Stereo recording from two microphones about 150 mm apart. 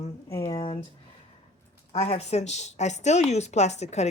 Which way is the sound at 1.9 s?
45° left (ahead or behind).